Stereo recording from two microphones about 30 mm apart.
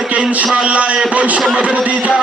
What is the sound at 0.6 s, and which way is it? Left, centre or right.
A man's voice, right.